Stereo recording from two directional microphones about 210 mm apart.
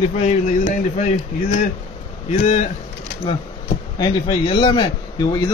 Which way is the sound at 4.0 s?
25° left (ahead or behind).